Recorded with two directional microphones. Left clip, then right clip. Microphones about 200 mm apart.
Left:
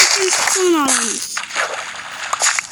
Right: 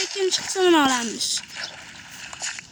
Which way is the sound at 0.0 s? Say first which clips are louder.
Left 10 dB; 50° left (ahead or behind).